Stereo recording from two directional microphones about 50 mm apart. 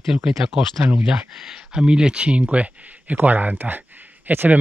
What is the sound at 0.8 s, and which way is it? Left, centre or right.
Speech, right.